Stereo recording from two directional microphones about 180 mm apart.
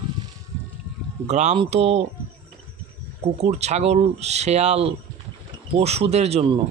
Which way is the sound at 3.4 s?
35° right (ahead or behind).